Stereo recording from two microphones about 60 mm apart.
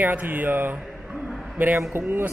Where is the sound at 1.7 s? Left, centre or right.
Right.